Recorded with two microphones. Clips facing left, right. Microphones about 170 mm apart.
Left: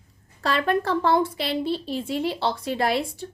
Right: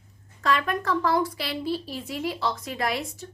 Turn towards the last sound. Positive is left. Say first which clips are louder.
# left 5 dB
turn(degrees=30)  # may be behind; listen again after turning